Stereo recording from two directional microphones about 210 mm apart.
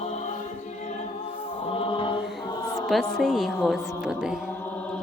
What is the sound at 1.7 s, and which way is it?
Mantra, 25° left (ahead or behind).